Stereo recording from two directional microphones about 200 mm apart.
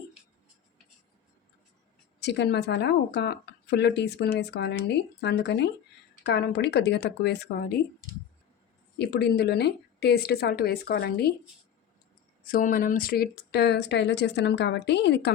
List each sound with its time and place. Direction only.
2.2 s speech: 55° left (ahead or behind)
9.0 s a woman's voice: 55° left (ahead or behind)
12.5 s speech: 45° left (ahead or behind)